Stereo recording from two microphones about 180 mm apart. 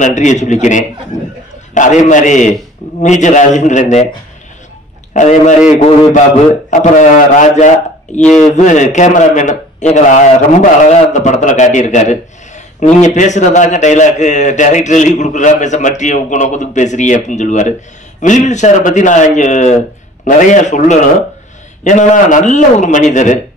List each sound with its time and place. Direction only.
0.0 s a man's voice: 40° left (ahead or behind)
5.1 s a man's voice: 40° left (ahead or behind)
6.7 s a man's voice: 45° left (ahead or behind)